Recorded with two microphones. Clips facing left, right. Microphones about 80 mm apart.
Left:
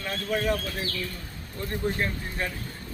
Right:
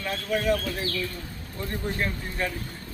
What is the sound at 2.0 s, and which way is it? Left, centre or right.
Speech, left.